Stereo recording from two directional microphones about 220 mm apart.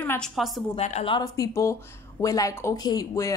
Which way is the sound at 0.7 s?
30° left (ahead or behind).